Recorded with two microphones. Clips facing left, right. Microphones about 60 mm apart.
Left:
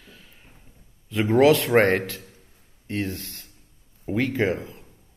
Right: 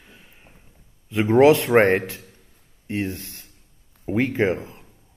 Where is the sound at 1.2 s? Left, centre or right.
Centre.